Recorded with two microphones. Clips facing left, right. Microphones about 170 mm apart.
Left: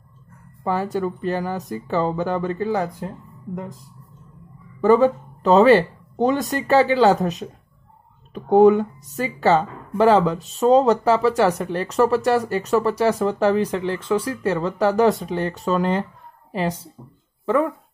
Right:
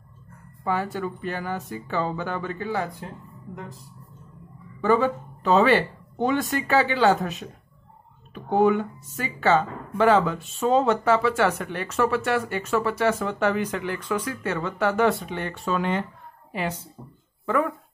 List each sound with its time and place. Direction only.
0.7 s speech: 40° left (ahead or behind)
4.8 s speech: 40° left (ahead or behind)
17.5 s speech: 25° left (ahead or behind)